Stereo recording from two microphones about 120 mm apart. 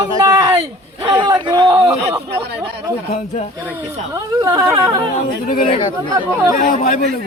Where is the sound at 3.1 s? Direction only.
85° left.